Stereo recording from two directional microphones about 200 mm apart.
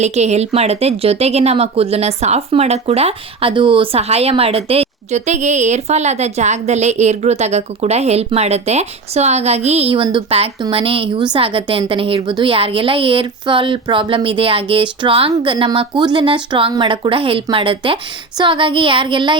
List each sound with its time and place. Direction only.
0.0 s speech: 35° right (ahead or behind)